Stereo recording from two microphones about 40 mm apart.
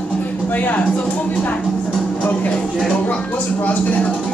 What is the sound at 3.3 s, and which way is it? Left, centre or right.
Speech, left.